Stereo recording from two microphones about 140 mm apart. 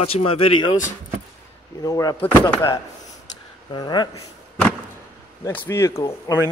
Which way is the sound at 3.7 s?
30° left (ahead or behind).